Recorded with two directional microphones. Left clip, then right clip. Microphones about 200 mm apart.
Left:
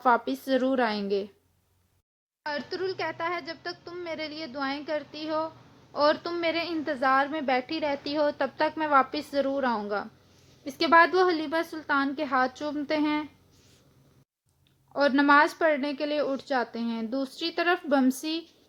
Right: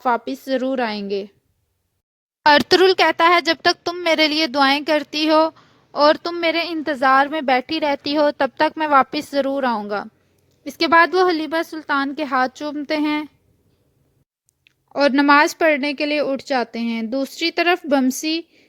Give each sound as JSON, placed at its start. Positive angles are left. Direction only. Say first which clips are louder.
{"t": 0.0, "sound": "a woman's voice", "louder": "right 3 dB", "side_deg": -30}
{"t": 2.4, "sound": "a woman's voice", "louder": "right 19 dB", "side_deg": -60}
{"t": 14.6, "sound": "a woman's voice", "louder": "right 7 dB", "side_deg": -45}